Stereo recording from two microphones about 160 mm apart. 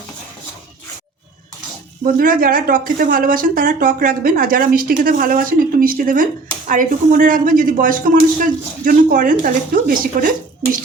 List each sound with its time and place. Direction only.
2.1 s speech: 60° right (ahead or behind)